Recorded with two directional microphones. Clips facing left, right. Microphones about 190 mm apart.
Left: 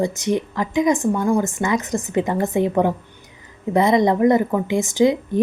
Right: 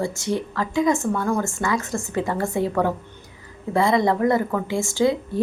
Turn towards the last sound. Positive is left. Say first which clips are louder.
# left 4 dB
turn(degrees=20)  # may be behind; listen again after turning